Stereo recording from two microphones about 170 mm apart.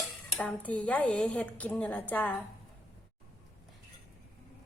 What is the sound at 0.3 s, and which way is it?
A woman's voice, 10° left (ahead or behind).